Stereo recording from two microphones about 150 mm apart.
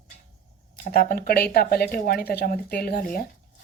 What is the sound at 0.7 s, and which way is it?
Speech, 70° left (ahead or behind).